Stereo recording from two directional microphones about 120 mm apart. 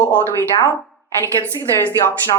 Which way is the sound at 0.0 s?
20° left (ahead or behind).